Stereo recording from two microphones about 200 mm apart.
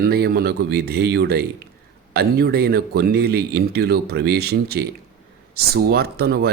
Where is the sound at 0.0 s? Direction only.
50° right (ahead or behind).